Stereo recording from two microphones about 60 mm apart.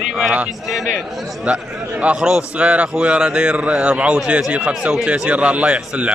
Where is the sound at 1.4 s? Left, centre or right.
Centre.